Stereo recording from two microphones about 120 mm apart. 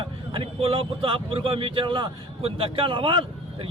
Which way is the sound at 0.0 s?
45° right (ahead or behind).